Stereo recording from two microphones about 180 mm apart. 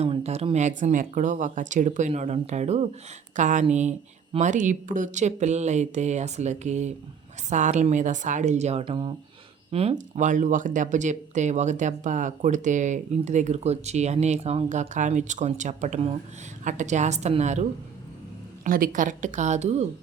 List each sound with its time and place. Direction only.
0.0 s speech: 35° right (ahead or behind)
9.7 s speech: 40° right (ahead or behind)